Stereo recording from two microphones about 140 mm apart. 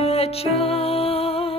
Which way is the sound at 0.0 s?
45° left (ahead or behind).